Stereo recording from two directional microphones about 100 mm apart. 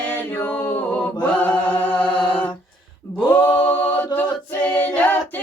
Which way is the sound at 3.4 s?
15° left (ahead or behind).